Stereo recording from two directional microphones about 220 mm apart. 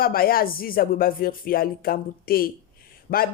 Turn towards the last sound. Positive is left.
turn(degrees=45)  # may be behind; listen again after turning